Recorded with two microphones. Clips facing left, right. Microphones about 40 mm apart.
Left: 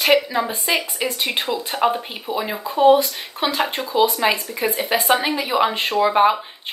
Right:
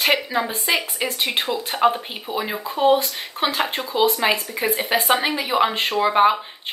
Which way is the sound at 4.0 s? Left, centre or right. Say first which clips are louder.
Left 1 dB; right.